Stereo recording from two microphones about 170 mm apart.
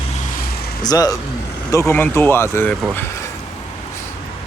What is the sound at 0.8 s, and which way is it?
Speech, 20° left (ahead or behind).